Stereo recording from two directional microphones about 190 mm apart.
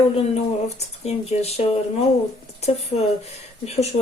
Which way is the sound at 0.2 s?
35° left (ahead or behind).